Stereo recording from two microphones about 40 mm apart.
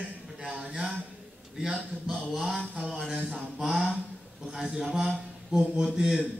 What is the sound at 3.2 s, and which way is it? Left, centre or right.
Mantra, centre.